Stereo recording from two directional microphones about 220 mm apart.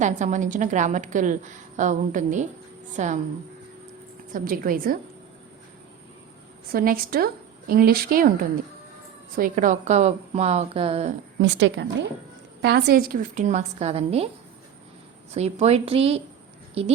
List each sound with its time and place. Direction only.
0.0 s a woman's voice: 35° right (ahead or behind)
4.3 s a woman's voice: 40° right (ahead or behind)
6.7 s a woman's voice: 45° right (ahead or behind)
9.3 s a woman's voice: 40° right (ahead or behind)
11.4 s a woman's voice: 55° right (ahead or behind); by 14.3 s 25° right (ahead or behind)
15.3 s a woman's voice: 30° right (ahead or behind)